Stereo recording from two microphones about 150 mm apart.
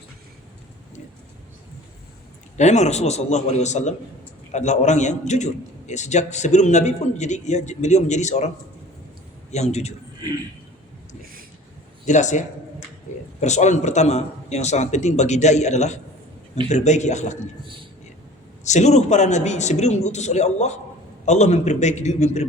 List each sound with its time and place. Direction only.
2.6 s a man's voice: 50° left (ahead or behind)
9.5 s a man's voice: 50° left (ahead or behind)
10.2 s a man's voice: 25° right (ahead or behind)
11.2 s a sound: 75° right (ahead or behind)
12.0 s a man's voice: 55° left (ahead or behind)
13.1 s a sound: 50° left (ahead or behind)
13.4 s a man's voice: 50° left (ahead or behind)
18.6 s a man's voice: 50° left (ahead or behind)